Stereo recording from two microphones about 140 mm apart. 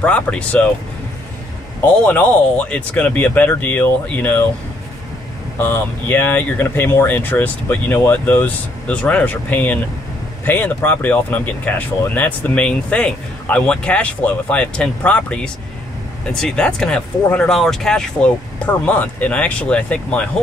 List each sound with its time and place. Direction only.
0.0 s speech: 10° left (ahead or behind)
2.0 s speech: 10° left (ahead or behind)
5.6 s speech: 15° left (ahead or behind)